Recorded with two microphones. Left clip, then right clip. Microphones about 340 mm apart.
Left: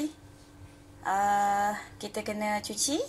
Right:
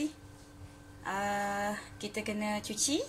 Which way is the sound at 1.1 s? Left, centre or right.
Centre.